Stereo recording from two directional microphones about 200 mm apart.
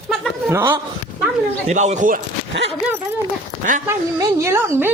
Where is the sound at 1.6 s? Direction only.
35° right (ahead or behind).